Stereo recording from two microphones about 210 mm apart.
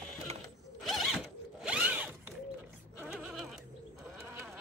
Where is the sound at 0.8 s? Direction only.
Centre (ahead or behind).